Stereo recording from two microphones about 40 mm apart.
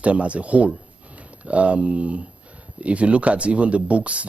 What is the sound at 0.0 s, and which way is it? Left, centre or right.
Speech, right.